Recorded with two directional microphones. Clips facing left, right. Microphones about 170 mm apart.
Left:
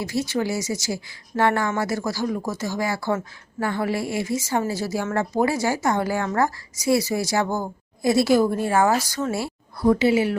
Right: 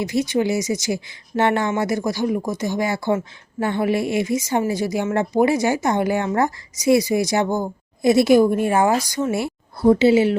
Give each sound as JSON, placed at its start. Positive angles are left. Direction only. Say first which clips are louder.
{"t": 0.0, "sound": "speech", "louder": "right 4 dB", "side_deg": -20}